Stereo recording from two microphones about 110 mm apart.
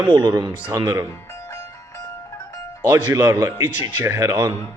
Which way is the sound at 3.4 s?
35° right (ahead or behind).